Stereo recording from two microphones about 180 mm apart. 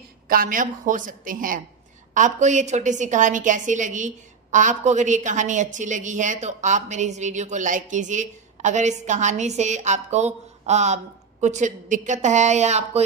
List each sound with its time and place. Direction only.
0.3 s a woman's voice: 50° right (ahead or behind)